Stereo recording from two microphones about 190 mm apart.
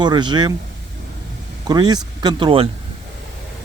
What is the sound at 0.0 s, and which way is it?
Speech, 25° right (ahead or behind).